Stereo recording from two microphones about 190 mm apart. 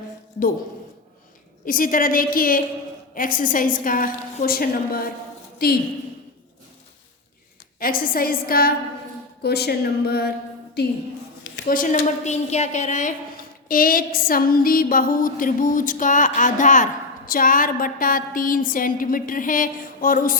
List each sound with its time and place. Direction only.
1.6 s a woman's voice: 45° left (ahead or behind)
7.8 s a woman's voice: 50° left (ahead or behind)
11.5 s a woman's voice: 50° left (ahead or behind)